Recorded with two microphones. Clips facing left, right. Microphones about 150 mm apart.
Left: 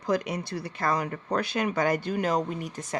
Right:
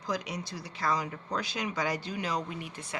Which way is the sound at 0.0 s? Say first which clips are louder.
Left 7 dB; 55° left (ahead or behind).